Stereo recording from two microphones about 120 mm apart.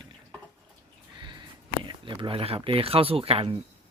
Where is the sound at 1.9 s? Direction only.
40° right (ahead or behind).